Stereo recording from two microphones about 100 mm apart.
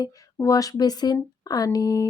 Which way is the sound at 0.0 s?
35° left (ahead or behind).